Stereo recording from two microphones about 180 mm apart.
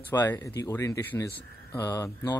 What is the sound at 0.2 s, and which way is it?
Speech, 10° left (ahead or behind).